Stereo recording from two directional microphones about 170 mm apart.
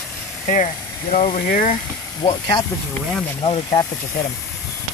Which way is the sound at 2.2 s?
30° left (ahead or behind).